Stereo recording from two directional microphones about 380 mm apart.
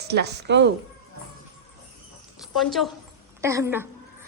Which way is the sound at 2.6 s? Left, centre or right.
Centre.